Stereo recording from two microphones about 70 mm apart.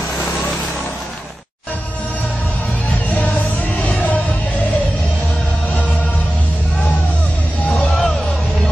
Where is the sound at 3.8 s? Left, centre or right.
Left.